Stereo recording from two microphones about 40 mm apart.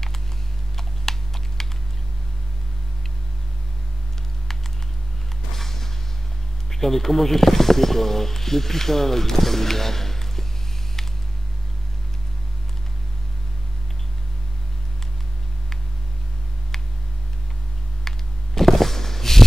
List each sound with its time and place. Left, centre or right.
0.7 s computer keyboard: centre
5.6 s music: centre
6.7 s speech: centre
18.0 s a sound: centre